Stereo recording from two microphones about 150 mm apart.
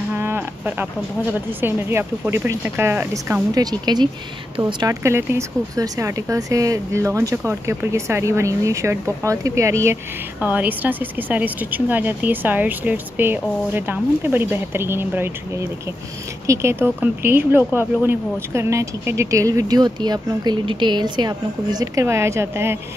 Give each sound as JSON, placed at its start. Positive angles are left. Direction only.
{"t": 0.1, "sound": "speech", "side_deg": -15}
{"t": 3.7, "sound": "speech", "side_deg": -30}
{"t": 5.0, "sound": "speech", "side_deg": -20}